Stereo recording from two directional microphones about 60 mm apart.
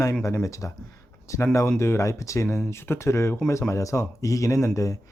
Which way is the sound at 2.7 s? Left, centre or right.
Left.